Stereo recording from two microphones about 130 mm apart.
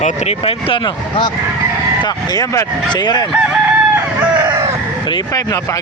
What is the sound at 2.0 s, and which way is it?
Speech, 30° left (ahead or behind).